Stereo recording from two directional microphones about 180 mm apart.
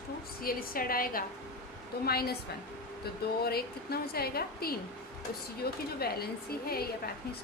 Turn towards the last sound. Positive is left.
turn(degrees=60)  # may be behind; listen again after turning